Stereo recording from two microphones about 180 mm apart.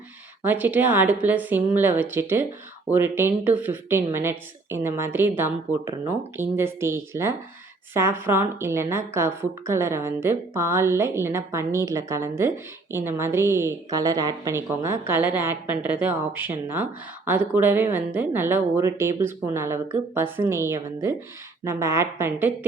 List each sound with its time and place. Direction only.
0.4 s a woman's voice: 10° right (ahead or behind)